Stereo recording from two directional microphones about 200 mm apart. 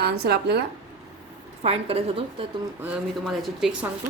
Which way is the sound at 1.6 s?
30° right (ahead or behind).